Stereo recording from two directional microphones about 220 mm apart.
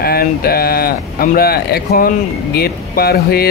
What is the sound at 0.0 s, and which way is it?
Speech, 45° left (ahead or behind).